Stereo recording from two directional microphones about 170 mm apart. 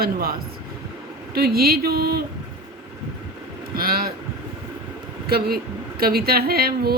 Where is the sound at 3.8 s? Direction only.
65° right (ahead or behind).